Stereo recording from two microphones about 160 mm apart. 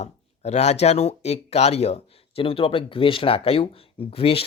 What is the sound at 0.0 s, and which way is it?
Speech, 45° left (ahead or behind).